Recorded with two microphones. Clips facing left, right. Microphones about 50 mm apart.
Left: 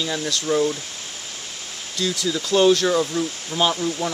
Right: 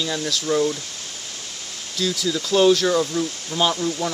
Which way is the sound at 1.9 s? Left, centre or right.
Centre.